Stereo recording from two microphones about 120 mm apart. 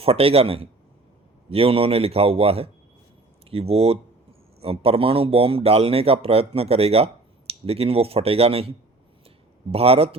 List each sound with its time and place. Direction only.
0.0 s a man's voice: 55° right (ahead or behind)
9.7 s speech: 55° right (ahead or behind)